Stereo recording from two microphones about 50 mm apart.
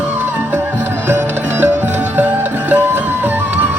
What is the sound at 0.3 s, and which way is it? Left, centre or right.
Music, right.